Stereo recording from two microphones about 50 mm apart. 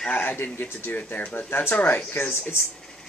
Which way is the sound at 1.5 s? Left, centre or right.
Left.